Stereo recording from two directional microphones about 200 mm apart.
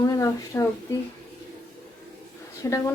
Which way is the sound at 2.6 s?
15° left (ahead or behind).